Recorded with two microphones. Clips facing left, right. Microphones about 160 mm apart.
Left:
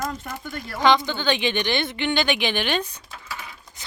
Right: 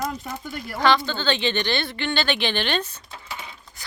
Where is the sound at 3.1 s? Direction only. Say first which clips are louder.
Right 1 dB; 25° right (ahead or behind).